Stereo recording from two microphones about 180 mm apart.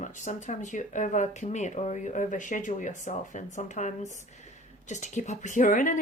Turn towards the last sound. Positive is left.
turn(degrees=45)  # may be behind; listen again after turning